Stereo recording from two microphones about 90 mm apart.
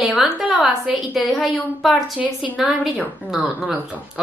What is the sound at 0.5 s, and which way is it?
Speech, 10° right (ahead or behind).